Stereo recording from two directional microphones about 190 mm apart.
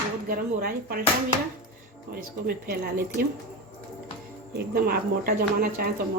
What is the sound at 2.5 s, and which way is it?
Speech, 50° right (ahead or behind).